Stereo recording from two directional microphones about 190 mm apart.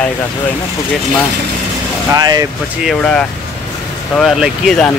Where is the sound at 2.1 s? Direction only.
20° right (ahead or behind).